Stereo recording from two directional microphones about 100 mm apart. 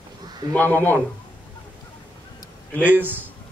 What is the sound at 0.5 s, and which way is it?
Speech, 20° left (ahead or behind).